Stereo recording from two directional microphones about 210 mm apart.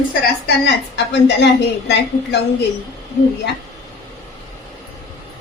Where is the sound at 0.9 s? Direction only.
55° left (ahead or behind).